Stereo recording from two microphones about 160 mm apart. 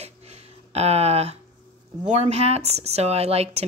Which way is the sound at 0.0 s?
40° right (ahead or behind).